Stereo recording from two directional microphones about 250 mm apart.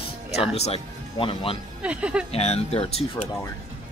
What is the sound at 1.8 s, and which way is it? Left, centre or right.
Speech, centre.